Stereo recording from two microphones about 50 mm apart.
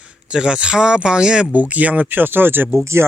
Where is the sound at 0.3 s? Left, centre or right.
Centre.